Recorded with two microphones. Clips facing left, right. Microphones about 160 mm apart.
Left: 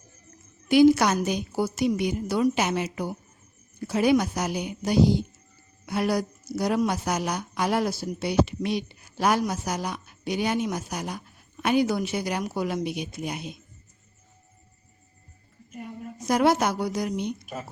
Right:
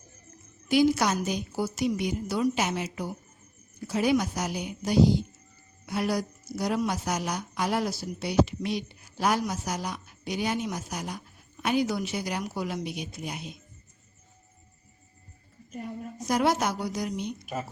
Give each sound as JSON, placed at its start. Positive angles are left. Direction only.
{"t": 0.7, "sound": "speech", "side_deg": 60}
{"t": 16.2, "sound": "speech", "side_deg": 60}